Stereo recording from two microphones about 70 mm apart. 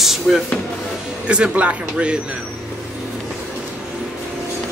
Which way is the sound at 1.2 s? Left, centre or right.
Centre.